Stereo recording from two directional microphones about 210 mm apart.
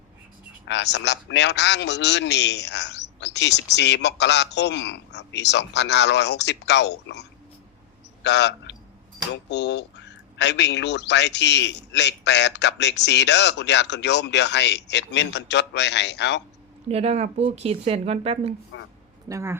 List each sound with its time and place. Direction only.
0.7 s a man's voice: 55° left (ahead or behind)
16.9 s speech: 30° right (ahead or behind)
18.7 s speech: 65° left (ahead or behind)
19.3 s speech: 15° right (ahead or behind)